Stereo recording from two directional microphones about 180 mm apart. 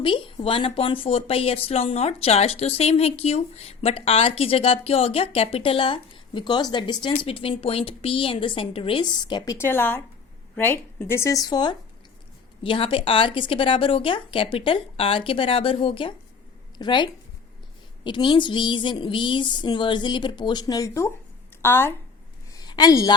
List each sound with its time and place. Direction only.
0.0 s speech: 30° left (ahead or behind)
9.6 s a woman's voice: 10° left (ahead or behind)
22.5 s a sound: 25° left (ahead or behind)